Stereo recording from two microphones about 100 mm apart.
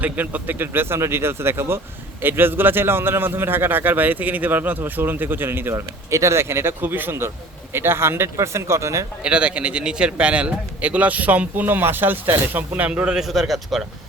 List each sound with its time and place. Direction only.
0.0 s a man's voice: 15° right (ahead or behind)
9.2 s a man's voice: 10° right (ahead or behind)